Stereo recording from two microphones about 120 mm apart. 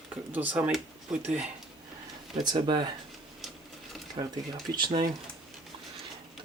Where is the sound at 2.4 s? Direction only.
35° right (ahead or behind).